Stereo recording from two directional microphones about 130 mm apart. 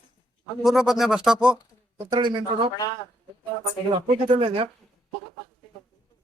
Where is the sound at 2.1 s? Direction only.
40° right (ahead or behind).